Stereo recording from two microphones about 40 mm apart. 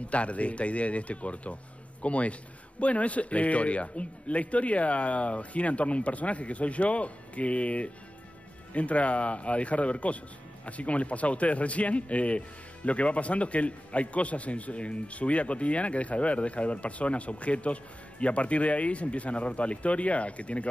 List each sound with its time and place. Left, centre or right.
0.1 s a man's voice: left